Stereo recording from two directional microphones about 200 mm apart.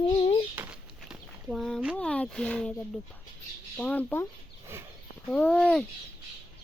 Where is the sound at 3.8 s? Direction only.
10° left (ahead or behind).